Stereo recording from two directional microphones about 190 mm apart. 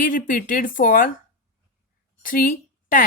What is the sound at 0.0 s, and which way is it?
Speech, 45° left (ahead or behind).